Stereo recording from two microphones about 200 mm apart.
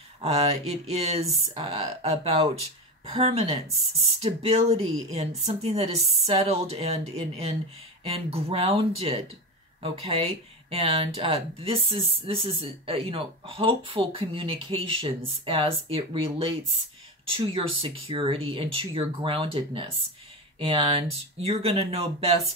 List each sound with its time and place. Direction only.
0.2 s speech: 30° right (ahead or behind)